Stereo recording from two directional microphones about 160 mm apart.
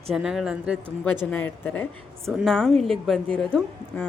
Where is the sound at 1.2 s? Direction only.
10° left (ahead or behind).